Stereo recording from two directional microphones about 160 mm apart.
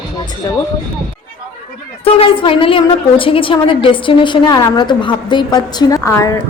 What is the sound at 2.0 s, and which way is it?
A woman's voice, 35° left (ahead or behind).